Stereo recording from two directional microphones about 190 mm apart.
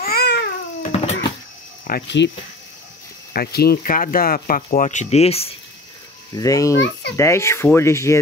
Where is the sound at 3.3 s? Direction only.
55° left (ahead or behind); by 5.5 s 30° left (ahead or behind).